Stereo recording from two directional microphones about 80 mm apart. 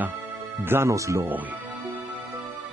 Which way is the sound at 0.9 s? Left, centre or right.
Right.